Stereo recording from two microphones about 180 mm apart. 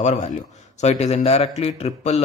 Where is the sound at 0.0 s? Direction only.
40° left (ahead or behind).